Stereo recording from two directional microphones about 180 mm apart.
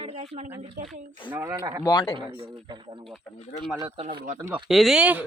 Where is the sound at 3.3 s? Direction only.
10° left (ahead or behind).